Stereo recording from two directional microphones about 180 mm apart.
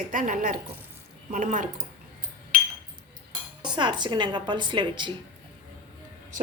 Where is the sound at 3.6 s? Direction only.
25° right (ahead or behind).